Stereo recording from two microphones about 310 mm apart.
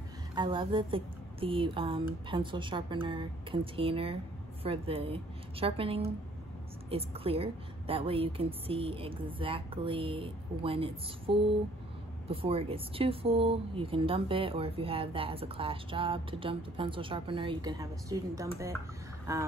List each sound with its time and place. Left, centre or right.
0.3 s speech: centre